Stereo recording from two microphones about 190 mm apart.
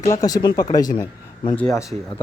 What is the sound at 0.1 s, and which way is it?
Speech, 20° left (ahead or behind).